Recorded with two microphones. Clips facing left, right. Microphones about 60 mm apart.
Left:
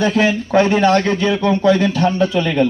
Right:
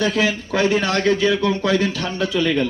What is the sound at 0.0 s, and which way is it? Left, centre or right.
Speech, left.